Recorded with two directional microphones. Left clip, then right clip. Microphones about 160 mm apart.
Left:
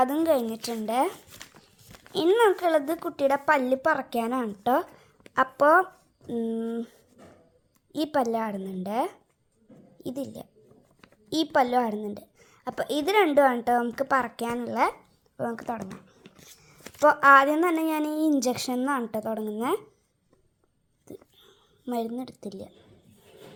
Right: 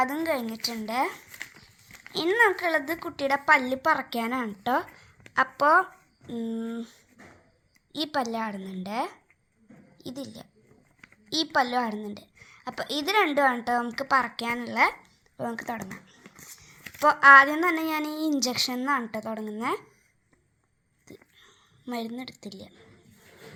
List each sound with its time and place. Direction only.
0.0 s speech: 55° left (ahead or behind)
1.4 s a sound: 20° left (ahead or behind)
2.1 s a child's voice: 50° left (ahead or behind); by 15.7 s 25° left (ahead or behind)
16.3 s a sound: centre (ahead or behind)
17.0 s speech: 40° left (ahead or behind)
21.4 s a woman's voice: 45° left (ahead or behind)